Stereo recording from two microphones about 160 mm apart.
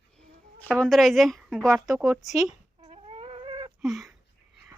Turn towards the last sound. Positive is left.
turn(degrees=0)  # may be behind; listen again after turning